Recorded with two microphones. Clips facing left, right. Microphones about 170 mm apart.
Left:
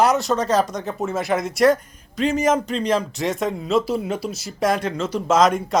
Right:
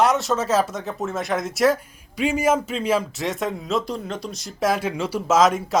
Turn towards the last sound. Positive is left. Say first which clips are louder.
# left 1 dB
turn(degrees=0)  # may be behind; listen again after turning